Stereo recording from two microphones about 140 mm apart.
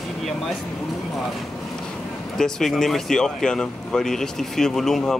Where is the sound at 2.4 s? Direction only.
5° left (ahead or behind).